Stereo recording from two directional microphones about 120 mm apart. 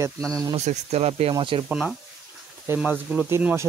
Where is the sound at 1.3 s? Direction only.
45° right (ahead or behind).